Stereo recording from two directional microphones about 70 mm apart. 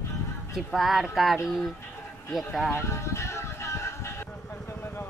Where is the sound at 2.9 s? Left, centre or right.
Left.